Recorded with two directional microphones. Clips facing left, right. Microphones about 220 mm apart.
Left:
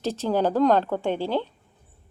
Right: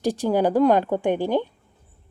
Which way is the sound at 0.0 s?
15° right (ahead or behind).